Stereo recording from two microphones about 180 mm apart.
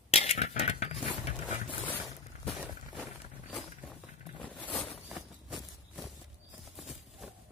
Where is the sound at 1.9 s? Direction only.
10° left (ahead or behind).